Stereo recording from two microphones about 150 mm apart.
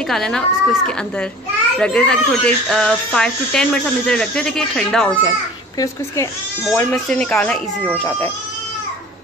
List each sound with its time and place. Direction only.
0.1 s speech: 5° left (ahead or behind)
6.7 s speech: 10° left (ahead or behind)